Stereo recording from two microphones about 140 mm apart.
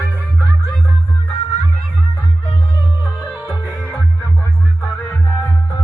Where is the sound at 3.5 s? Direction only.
20° left (ahead or behind).